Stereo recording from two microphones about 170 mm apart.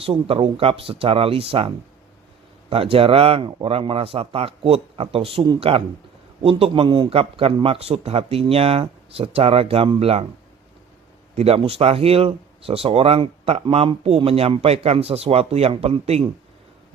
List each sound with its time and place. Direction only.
0.0 s speech: 35° right (ahead or behind)
11.3 s speech: 35° right (ahead or behind)